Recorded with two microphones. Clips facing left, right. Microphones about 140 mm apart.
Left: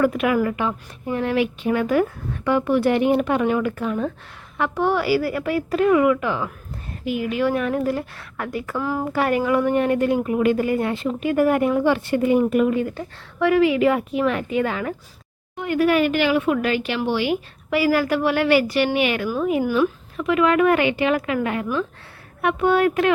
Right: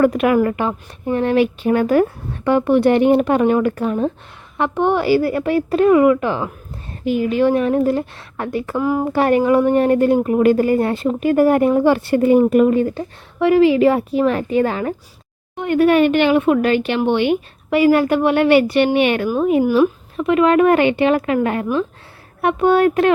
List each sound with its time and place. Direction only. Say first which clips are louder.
0.0 s a woman's voice: right 5 dB; 40° right (ahead or behind); by 9.1 s 20° right (ahead or behind)
9.1 s speech: right 5 dB; 30° right (ahead or behind)
12.9 s a woman's voice: right 5 dB; 25° right (ahead or behind)
16.3 s a woman's voice: right 5 dB; 40° right (ahead or behind)